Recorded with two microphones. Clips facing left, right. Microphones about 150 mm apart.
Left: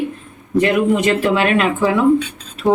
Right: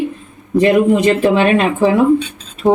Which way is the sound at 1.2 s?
25° right (ahead or behind).